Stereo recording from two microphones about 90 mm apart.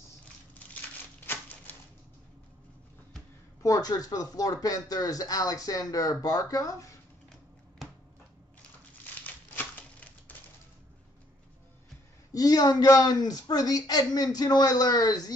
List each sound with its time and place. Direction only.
0.7 s a sound: 20° left (ahead or behind)
3.6 s a woman's voice: 40° left (ahead or behind)
9.0 s crumpling: 20° left (ahead or behind)
12.3 s a woman's voice: 45° left (ahead or behind)